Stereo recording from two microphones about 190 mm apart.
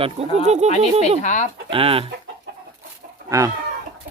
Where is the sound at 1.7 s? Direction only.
30° right (ahead or behind).